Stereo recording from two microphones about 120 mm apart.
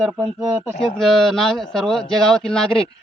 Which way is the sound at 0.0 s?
5° right (ahead or behind).